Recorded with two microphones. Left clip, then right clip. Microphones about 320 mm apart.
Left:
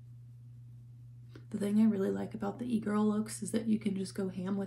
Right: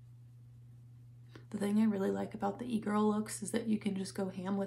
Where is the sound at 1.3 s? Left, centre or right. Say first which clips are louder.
Left 2 dB; centre.